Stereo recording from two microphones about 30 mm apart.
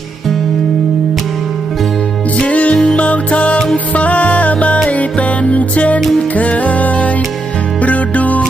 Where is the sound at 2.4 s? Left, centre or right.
Left.